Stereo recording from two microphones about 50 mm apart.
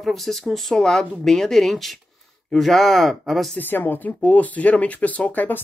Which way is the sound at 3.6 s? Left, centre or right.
Left.